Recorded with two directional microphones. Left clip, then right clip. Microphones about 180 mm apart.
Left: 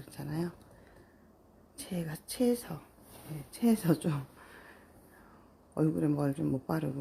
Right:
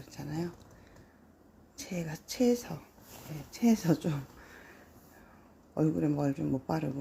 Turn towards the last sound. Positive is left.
turn(degrees=10)  # may be behind; listen again after turning